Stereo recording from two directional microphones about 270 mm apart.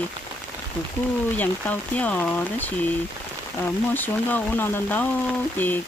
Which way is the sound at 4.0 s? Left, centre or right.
Centre.